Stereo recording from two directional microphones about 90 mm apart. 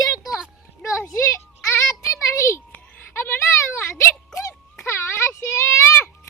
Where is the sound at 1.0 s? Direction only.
30° left (ahead or behind).